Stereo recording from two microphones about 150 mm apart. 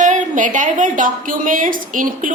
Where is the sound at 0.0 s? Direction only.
60° right (ahead or behind).